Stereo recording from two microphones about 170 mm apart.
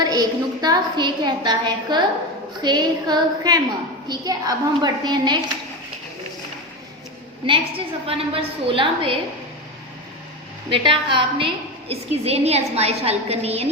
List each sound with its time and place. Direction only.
0.0 s a woman's voice: 25° right (ahead or behind)
7.4 s a woman's voice: 30° right (ahead or behind)
10.7 s a woman's voice: 30° right (ahead or behind)